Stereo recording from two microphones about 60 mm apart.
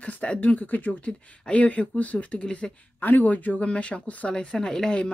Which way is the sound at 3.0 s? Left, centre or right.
Left.